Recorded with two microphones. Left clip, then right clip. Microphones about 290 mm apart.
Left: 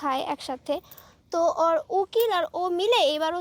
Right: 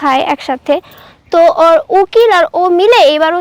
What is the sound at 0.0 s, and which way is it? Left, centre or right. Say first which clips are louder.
A woman's voice: right 16 dB; centre.